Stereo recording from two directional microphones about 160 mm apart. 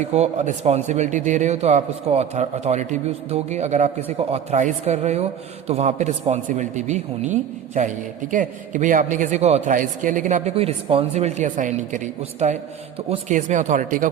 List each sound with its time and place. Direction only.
0.0 s a man's voice: 45° right (ahead or behind)
10.5 s a man's voice: 35° right (ahead or behind); by 14.1 s 55° right (ahead or behind)